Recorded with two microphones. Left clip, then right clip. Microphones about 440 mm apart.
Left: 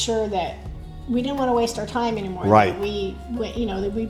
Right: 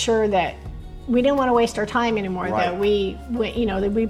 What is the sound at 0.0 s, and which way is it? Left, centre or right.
A woman's voice, right.